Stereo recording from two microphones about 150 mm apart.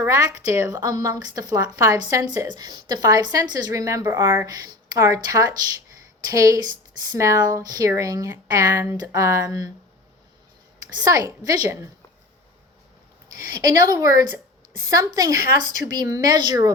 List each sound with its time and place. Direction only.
0.0 s a woman's voice: 20° right (ahead or behind)
10.9 s a woman's voice: 25° right (ahead or behind)
13.3 s a woman's voice: 25° right (ahead or behind)